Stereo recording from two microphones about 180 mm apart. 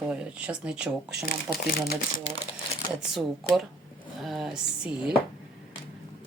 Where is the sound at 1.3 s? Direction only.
60° left (ahead or behind).